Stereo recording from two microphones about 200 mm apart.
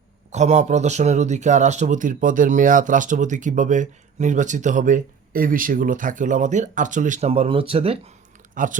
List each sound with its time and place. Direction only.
0.3 s speech: 35° right (ahead or behind)
8.5 s speech: 40° right (ahead or behind)